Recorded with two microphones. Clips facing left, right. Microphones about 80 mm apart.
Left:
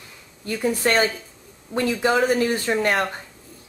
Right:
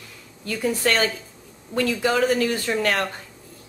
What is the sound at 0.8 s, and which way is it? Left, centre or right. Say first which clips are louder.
Speech: left 2 dB; left.